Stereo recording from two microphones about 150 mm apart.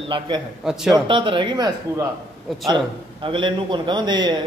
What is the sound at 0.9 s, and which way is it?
Speech, 35° right (ahead or behind).